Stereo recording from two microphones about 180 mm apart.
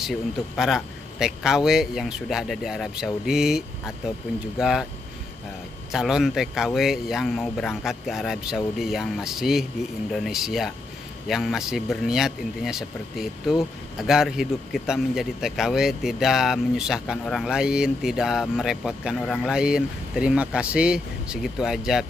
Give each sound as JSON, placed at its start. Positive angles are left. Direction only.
{"t": 0.0, "sound": "a man's voice", "side_deg": 0}
{"t": 5.9, "sound": "a man's voice", "side_deg": 0}